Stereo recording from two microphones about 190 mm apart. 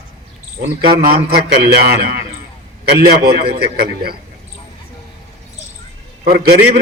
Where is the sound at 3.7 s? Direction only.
55° right (ahead or behind).